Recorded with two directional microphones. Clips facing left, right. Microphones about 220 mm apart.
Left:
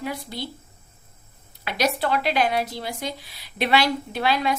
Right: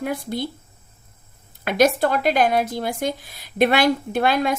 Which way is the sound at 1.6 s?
50° right (ahead or behind).